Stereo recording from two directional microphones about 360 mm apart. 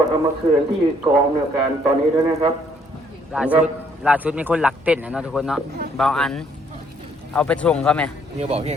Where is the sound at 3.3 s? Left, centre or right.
Centre.